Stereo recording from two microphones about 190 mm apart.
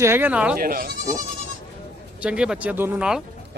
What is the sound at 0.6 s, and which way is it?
Speech, 50° right (ahead or behind).